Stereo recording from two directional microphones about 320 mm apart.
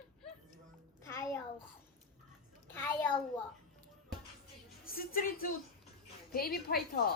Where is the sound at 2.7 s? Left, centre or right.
Centre.